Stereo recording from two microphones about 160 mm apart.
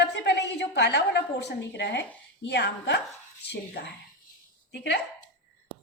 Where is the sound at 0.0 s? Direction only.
90° left.